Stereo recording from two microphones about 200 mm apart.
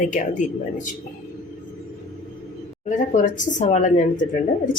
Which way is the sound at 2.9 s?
40° left (ahead or behind).